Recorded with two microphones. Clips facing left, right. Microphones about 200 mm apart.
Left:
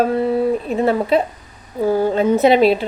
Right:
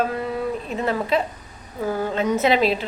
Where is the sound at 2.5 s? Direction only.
Centre (ahead or behind).